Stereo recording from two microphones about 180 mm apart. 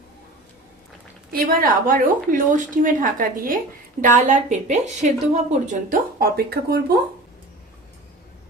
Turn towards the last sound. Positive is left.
turn(degrees=-60)  # may be behind; listen again after turning